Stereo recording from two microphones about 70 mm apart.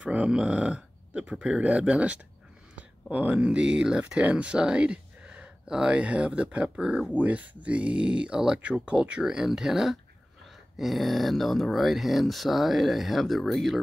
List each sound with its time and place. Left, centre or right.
0.0 s speech: centre
7.2 s speech: right; by 13.7 s centre